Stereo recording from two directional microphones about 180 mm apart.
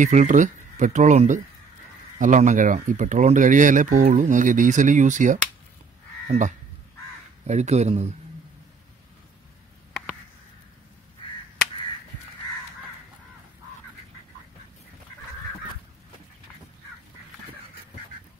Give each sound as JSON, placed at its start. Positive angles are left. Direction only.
{"t": 0.0, "sound": "speech", "side_deg": -45}